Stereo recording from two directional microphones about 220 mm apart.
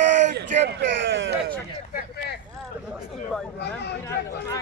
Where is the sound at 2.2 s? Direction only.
45° left (ahead or behind).